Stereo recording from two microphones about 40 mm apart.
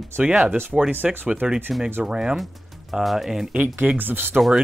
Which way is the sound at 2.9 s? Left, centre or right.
Centre.